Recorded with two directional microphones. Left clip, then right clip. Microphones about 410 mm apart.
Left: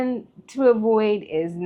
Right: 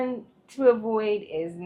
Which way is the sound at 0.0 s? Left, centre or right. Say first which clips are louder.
Left 3 dB; left.